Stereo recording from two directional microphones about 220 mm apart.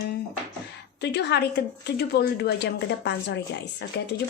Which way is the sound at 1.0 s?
50° left (ahead or behind).